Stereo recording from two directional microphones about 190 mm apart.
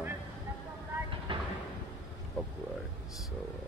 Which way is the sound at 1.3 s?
25° right (ahead or behind).